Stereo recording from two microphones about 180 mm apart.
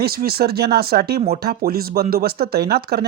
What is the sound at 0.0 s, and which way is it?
Speech, 60° right (ahead or behind).